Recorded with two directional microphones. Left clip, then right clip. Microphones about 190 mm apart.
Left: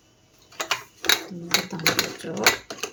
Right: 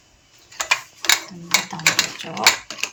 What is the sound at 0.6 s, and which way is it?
Mechanisms, 55° left (ahead or behind).